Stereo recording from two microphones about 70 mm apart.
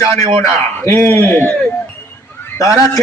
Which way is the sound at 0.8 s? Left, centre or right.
Left.